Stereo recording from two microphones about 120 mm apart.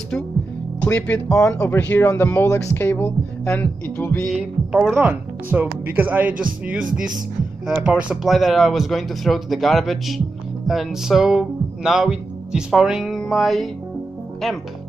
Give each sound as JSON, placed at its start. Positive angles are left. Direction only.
{"t": 0.7, "sound": "speech", "side_deg": 10}
{"t": 4.3, "sound": "speech", "side_deg": -5}
{"t": 5.0, "sound": "speech", "side_deg": -15}
{"t": 13.2, "sound": "music", "side_deg": 0}